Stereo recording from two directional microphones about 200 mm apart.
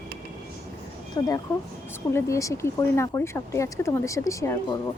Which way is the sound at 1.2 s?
20° left (ahead or behind).